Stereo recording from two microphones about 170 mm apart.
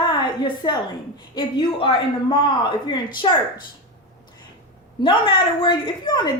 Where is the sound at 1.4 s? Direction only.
30° left (ahead or behind).